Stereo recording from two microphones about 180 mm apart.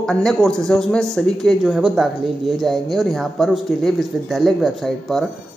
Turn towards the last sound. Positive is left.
turn(degrees=0)  # may be behind; listen again after turning